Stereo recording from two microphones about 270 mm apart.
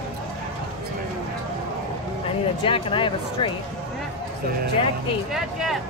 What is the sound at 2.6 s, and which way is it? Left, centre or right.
Speech, centre.